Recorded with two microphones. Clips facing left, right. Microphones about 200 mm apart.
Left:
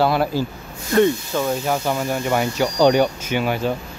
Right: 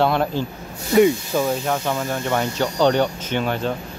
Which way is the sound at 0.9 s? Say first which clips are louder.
Right 1 dB; 10° right (ahead or behind).